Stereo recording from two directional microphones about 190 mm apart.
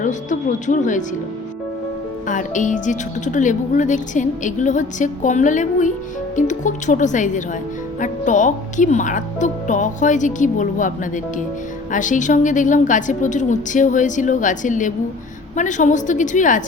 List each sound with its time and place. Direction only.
0.0 s speech: 40° left (ahead or behind)
2.2 s speech: 40° left (ahead or behind)